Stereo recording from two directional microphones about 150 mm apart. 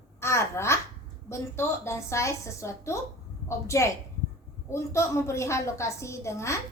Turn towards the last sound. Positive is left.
turn(degrees=20)  # may be behind; listen again after turning